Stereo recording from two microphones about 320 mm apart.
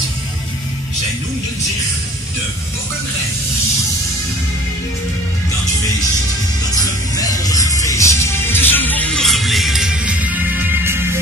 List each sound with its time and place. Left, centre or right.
6.7 s music: centre